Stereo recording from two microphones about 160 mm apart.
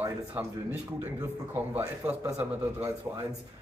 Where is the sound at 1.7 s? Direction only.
15° right (ahead or behind).